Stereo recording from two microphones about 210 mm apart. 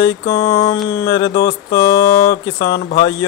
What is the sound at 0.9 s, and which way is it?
Speech, 15° left (ahead or behind).